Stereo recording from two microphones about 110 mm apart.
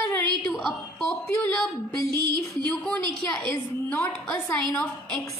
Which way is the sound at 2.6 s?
15° left (ahead or behind).